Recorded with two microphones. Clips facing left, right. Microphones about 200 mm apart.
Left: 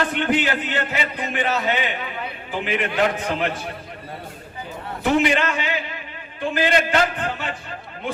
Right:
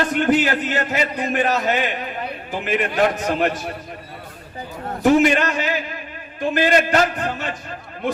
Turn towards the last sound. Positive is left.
turn(degrees=-40)  # may be behind; listen again after turning